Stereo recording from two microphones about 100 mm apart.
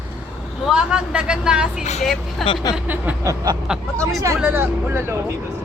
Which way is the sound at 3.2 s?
40° right (ahead or behind).